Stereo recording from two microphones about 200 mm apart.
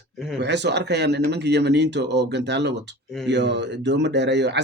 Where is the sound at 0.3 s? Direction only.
60° right (ahead or behind).